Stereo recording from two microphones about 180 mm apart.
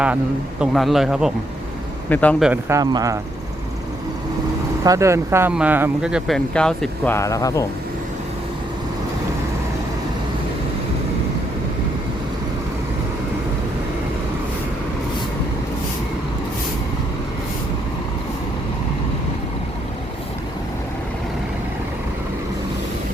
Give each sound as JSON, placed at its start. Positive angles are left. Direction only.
{"t": 0.6, "sound": "speech", "side_deg": 0}
{"t": 2.0, "sound": "speech", "side_deg": 10}
{"t": 2.4, "sound": "speech", "side_deg": -10}
{"t": 4.8, "sound": "speech", "side_deg": -15}